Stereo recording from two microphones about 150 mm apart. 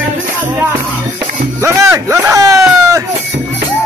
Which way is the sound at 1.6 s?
20° right (ahead or behind).